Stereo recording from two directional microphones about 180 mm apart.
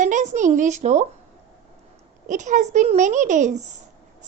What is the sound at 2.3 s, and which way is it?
A woman's voice, 45° right (ahead or behind).